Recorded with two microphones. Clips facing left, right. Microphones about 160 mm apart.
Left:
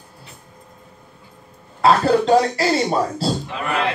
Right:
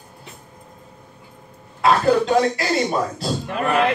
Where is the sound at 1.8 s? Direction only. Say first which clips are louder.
Left 1 dB; 30° left (ahead or behind).